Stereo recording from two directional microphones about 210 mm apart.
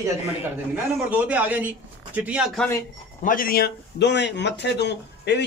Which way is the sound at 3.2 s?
40° left (ahead or behind).